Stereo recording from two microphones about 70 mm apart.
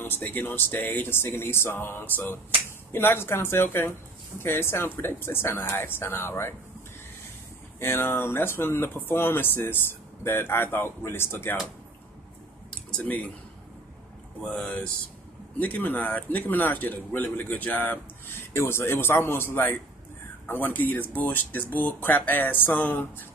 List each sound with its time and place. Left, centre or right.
0.0 s speech: left
7.8 s speech: left
12.9 s speech: left
14.4 s speech: centre
15.6 s speech: left